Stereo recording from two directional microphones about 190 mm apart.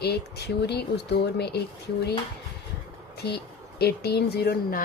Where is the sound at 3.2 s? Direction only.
60° left (ahead or behind).